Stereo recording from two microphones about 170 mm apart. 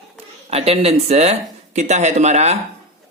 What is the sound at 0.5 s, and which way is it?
A woman's voice, 35° right (ahead or behind).